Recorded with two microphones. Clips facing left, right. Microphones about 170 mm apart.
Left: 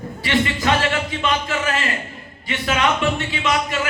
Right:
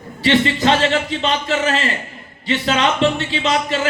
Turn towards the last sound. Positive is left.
turn(degrees=-30)  # may be behind; listen again after turning